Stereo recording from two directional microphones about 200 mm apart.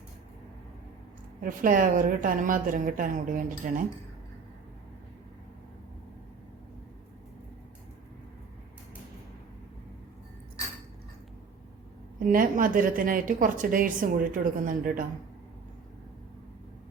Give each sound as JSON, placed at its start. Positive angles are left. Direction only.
{"t": 1.4, "sound": "speech", "side_deg": -45}
{"t": 12.2, "sound": "speech", "side_deg": -45}